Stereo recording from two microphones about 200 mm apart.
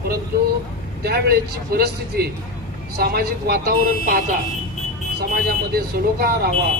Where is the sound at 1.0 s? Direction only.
50° right (ahead or behind).